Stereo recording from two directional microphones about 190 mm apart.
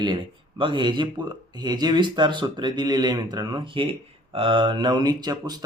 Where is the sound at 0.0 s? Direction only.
25° right (ahead or behind).